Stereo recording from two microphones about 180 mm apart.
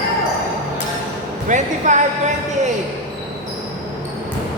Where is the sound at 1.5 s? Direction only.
45° right (ahead or behind).